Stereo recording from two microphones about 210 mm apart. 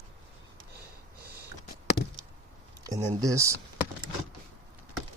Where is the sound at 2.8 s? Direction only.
15° right (ahead or behind).